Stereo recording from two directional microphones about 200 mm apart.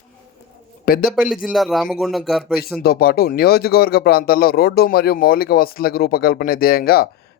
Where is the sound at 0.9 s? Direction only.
50° left (ahead or behind).